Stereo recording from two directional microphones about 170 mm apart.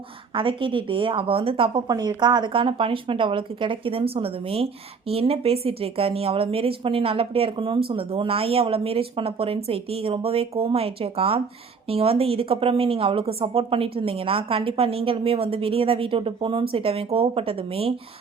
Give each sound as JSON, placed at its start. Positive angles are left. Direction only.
{"t": 0.3, "sound": "a woman's voice", "side_deg": -30}